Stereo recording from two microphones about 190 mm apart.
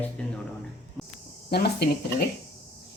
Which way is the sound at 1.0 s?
Centre (ahead or behind).